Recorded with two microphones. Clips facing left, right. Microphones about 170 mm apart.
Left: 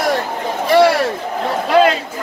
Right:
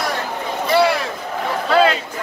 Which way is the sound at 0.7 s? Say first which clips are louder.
Left 4 dB; 40° left (ahead or behind).